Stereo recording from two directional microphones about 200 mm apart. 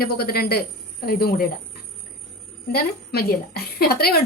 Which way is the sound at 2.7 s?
50° left (ahead or behind).